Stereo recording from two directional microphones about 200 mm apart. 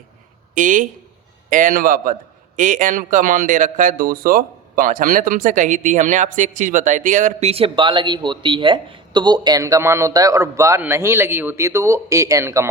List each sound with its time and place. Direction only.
0.5 s a man's voice: 40° right (ahead or behind); by 12.6 s 15° right (ahead or behind)